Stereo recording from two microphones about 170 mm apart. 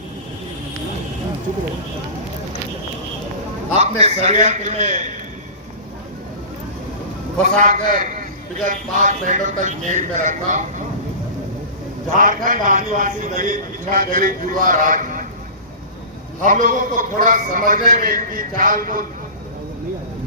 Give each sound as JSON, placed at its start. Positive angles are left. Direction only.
{"t": 3.8, "sound": "a man's voice", "side_deg": -40}
{"t": 7.4, "sound": "a man's voice", "side_deg": -50}
{"t": 12.1, "sound": "a man's voice", "side_deg": -55}
{"t": 16.4, "sound": "a man's voice", "side_deg": -50}